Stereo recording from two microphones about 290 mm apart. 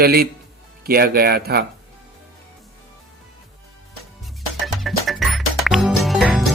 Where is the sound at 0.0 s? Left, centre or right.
Right.